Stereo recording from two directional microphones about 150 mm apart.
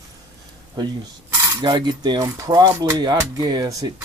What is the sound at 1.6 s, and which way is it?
Speech, 30° right (ahead or behind).